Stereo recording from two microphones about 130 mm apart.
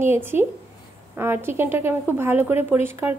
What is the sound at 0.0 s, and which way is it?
A woman's voice, 20° right (ahead or behind).